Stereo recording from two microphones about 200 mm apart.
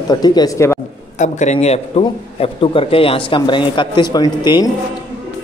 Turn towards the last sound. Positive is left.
turn(degrees=20)  # may be behind; listen again after turning